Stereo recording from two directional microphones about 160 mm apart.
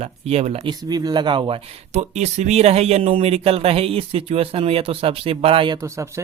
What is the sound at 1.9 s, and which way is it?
Speech, 45° right (ahead or behind).